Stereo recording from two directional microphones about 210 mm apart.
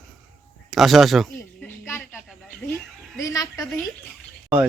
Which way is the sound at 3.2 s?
15° left (ahead or behind).